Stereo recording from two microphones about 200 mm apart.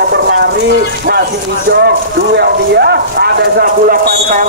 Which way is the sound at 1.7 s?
55° right (ahead or behind).